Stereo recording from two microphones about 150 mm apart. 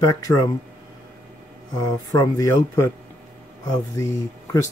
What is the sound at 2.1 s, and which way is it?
Speech, 25° left (ahead or behind).